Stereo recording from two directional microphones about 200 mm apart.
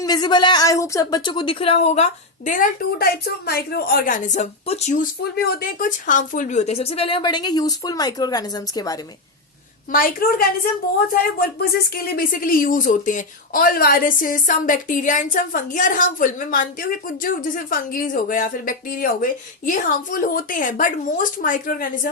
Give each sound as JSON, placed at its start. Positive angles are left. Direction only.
{"t": 0.0, "sound": "speech", "side_deg": 20}
{"t": 5.2, "sound": "speech", "side_deg": 50}
{"t": 9.9, "sound": "speech", "side_deg": 45}